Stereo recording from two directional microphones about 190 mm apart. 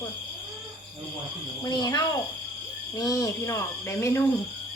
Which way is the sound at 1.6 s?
20° left (ahead or behind).